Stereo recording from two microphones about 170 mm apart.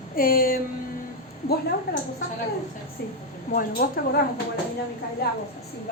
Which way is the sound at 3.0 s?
70° left (ahead or behind).